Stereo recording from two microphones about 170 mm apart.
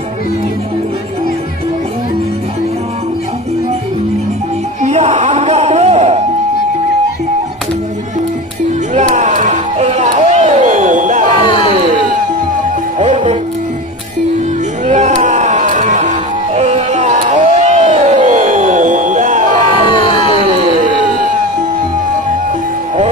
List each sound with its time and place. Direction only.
4.8 s music: 40° right (ahead or behind)
8.9 s music: 45° right (ahead or behind)
13.0 s music: 35° right (ahead or behind)
14.9 s music: 40° right (ahead or behind)
19.9 s music: 30° left (ahead or behind)
20.3 s a sound: 35° right (ahead or behind)